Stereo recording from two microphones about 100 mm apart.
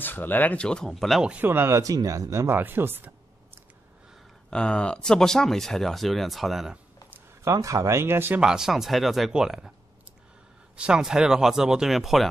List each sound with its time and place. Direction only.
0.0 s speech: 20° left (ahead or behind); by 1.2 s centre (ahead or behind)
1.2 s speech: 15° right (ahead or behind)
4.5 s speech: 10° left (ahead or behind)
7.1 s speech: 30° right (ahead or behind)
8.4 s speech: 5° right (ahead or behind)
10.8 s speech: 5° right (ahead or behind)